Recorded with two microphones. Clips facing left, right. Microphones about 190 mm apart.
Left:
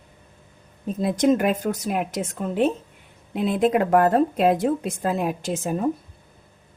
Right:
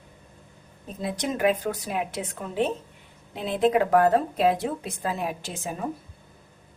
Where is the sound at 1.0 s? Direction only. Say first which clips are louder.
Left 8 dB; 50° left (ahead or behind).